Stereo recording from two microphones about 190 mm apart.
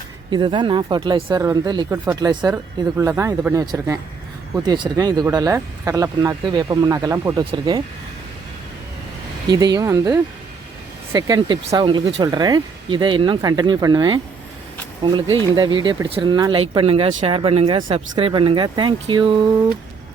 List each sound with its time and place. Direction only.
0.3 s speech: 25° right (ahead or behind)
9.5 s speech: 20° right (ahead or behind)